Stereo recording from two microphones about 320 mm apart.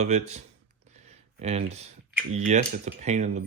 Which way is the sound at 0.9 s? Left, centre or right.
Right.